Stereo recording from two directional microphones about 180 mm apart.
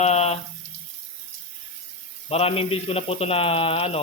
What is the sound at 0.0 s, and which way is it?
Water, 35° left (ahead or behind).